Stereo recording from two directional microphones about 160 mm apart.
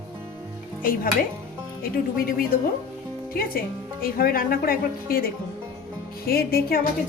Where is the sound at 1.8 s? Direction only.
65° left (ahead or behind).